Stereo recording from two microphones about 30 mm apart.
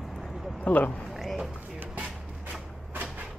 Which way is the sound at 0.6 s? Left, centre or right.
Left.